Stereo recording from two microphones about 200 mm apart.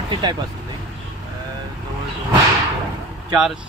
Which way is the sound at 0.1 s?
20° right (ahead or behind).